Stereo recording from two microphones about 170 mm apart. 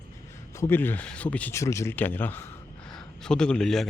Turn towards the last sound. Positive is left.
turn(degrees=0)  # may be behind; listen again after turning